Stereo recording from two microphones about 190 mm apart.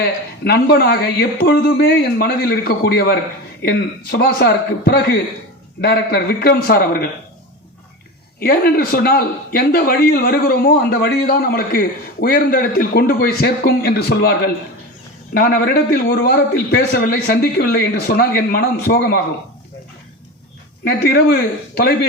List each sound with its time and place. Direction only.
0.0 s a man's voice: 55° left (ahead or behind)
8.4 s a man's voice: 55° left (ahead or behind)
20.8 s a man's voice: 55° left (ahead or behind)